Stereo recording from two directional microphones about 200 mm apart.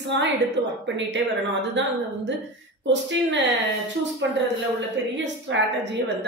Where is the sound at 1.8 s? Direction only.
65° right (ahead or behind).